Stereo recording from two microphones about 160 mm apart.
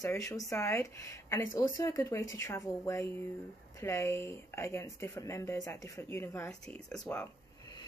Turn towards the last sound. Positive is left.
turn(degrees=10)  # may be behind; listen again after turning